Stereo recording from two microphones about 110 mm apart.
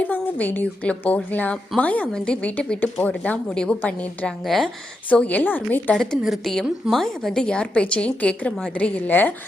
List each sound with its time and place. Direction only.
0.0 s a woman's voice: 15° left (ahead or behind)
4.4 s speech: centre (ahead or behind)
5.0 s a woman's voice: 15° left (ahead or behind)
6.0 s a woman's voice: centre (ahead or behind)